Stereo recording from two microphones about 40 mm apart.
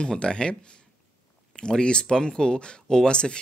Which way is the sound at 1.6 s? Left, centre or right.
Left.